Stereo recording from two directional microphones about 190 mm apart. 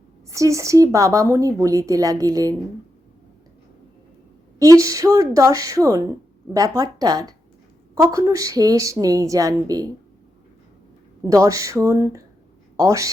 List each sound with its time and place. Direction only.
0.3 s speech: 15° right (ahead or behind)
4.6 s speech: 15° right (ahead or behind)
11.2 s a man's voice: 20° right (ahead or behind)